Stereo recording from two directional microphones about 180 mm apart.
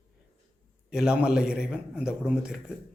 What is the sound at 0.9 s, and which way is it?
A man's voice, 5° right (ahead or behind).